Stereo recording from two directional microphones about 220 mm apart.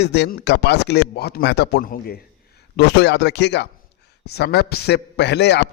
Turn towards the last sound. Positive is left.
turn(degrees=50)  # may be behind; listen again after turning